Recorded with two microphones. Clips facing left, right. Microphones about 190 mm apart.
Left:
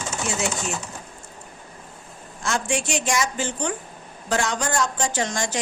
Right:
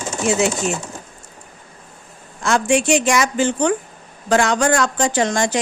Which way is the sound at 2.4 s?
70° right (ahead or behind).